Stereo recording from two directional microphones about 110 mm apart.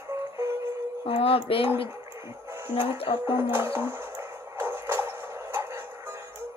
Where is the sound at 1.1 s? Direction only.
60° left (ahead or behind).